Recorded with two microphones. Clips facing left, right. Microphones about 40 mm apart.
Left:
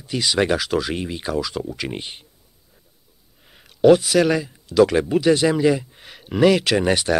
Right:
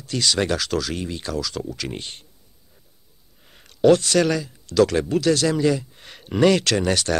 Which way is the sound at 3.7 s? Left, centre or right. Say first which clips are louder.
Left 2 dB; centre.